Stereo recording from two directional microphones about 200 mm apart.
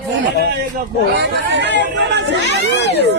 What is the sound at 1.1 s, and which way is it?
Speech, 60° right (ahead or behind).